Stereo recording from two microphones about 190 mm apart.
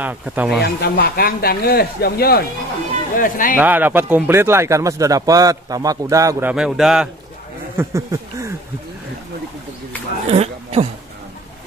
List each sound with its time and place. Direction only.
0.0 s speech: 10° right (ahead or behind)
0.6 s speech: 55° left (ahead or behind)
3.5 s speech: 10° right (ahead or behind)
6.5 s a man's voice: 5° right (ahead or behind)
7.7 s a sound: 15° right (ahead or behind)
10.2 s speech: 35° right (ahead or behind)